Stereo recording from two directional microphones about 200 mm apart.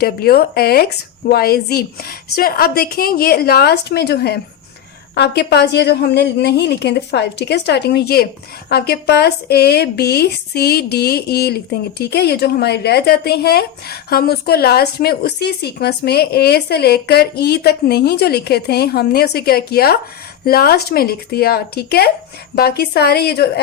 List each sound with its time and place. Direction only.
0.0 s a woman's voice: 50° left (ahead or behind)